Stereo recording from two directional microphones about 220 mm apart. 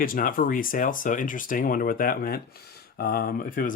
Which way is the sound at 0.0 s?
40° left (ahead or behind).